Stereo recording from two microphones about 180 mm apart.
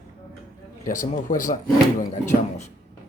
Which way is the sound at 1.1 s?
45° left (ahead or behind).